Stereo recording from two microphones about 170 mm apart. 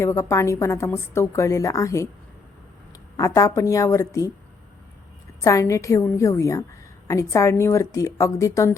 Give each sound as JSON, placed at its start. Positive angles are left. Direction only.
{"t": 0.0, "sound": "a woman's voice", "side_deg": 15}
{"t": 3.2, "sound": "a woman's voice", "side_deg": 20}
{"t": 5.4, "sound": "a woman's voice", "side_deg": 20}